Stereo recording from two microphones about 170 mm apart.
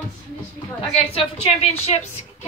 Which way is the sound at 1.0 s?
35° left (ahead or behind).